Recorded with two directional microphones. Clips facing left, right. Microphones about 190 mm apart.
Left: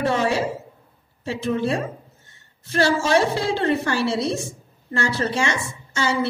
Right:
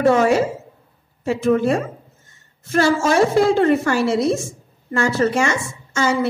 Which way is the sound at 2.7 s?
50° right (ahead or behind).